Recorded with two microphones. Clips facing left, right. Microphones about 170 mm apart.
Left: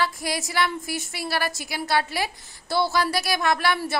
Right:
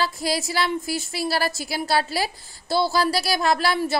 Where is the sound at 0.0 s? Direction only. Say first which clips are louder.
Right 2 dB; 30° right (ahead or behind).